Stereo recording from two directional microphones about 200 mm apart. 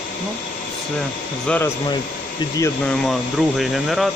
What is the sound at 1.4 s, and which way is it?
Speech, 5° left (ahead or behind).